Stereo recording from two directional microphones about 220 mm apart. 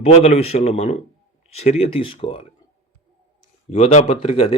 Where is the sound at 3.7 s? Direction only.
30° left (ahead or behind).